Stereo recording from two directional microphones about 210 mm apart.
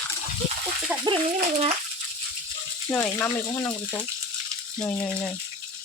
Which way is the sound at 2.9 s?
10° left (ahead or behind).